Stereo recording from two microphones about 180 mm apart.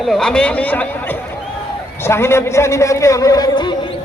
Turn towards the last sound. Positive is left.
turn(degrees=25)  # may be behind; listen again after turning